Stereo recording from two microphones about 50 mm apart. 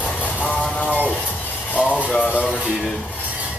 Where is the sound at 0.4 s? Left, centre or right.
Left.